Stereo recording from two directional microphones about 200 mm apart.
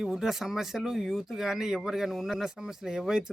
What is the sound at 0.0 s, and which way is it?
Speech, centre (ahead or behind).